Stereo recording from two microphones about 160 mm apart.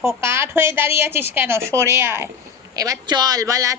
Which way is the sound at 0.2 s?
15° right (ahead or behind).